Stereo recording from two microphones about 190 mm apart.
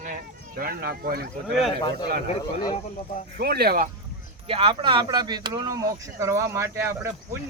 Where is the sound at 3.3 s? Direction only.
55° right (ahead or behind).